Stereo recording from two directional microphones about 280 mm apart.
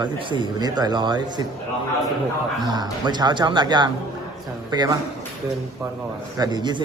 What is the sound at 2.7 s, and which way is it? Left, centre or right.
A man's voice, centre.